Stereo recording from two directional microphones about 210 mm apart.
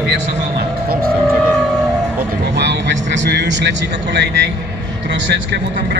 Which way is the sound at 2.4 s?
55° right (ahead or behind).